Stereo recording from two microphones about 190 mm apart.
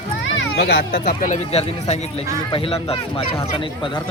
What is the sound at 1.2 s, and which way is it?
Speech, 35° left (ahead or behind).